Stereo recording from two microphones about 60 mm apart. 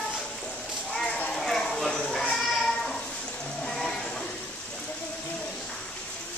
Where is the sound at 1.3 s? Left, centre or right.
Centre.